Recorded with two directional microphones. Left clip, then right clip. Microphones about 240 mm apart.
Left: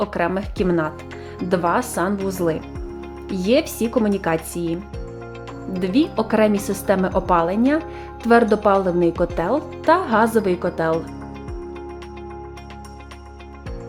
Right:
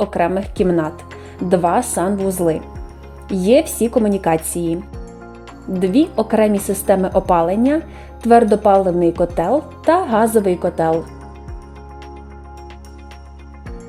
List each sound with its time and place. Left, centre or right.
0.1 s a woman's voice: centre
5.8 s a woman's voice: centre